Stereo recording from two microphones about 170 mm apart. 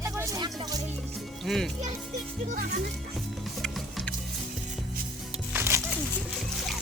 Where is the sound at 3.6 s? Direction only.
5° left (ahead or behind).